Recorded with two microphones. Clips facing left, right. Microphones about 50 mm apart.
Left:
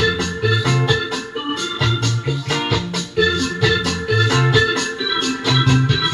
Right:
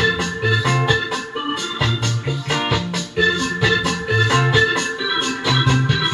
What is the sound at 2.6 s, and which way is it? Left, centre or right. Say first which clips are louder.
Music: even; centre.